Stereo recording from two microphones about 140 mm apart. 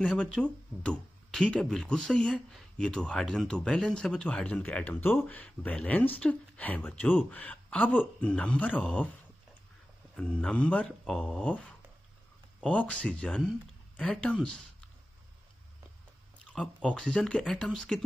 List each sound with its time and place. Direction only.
0.0 s speech: 5° left (ahead or behind)
10.1 s speech: 10° left (ahead or behind)
16.5 s speech: 5° left (ahead or behind)